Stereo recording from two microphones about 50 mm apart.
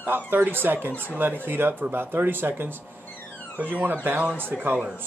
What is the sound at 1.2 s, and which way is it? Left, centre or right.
Speech, right.